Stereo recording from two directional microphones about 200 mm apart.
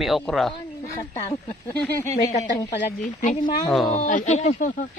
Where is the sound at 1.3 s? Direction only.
25° left (ahead or behind).